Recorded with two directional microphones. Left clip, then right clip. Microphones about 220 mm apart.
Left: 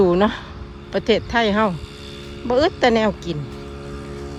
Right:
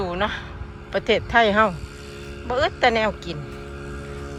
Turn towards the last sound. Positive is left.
turn(degrees=15)  # may be behind; listen again after turning